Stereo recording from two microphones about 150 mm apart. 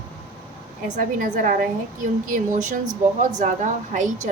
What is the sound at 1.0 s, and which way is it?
A woman's voice, 65° right (ahead or behind).